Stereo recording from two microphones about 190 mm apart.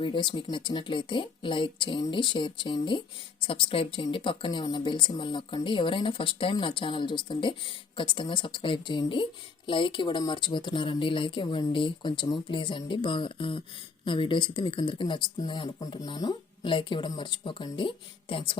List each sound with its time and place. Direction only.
0.0 s a woman's voice: 25° left (ahead or behind)